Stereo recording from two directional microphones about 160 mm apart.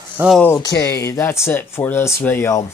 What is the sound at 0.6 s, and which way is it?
Speech, 25° left (ahead or behind).